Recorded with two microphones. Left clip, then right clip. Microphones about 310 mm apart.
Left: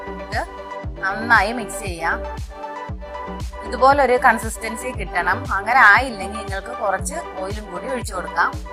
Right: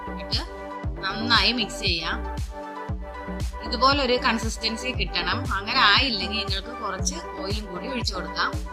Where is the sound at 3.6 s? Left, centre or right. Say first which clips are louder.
Left 6 dB; centre.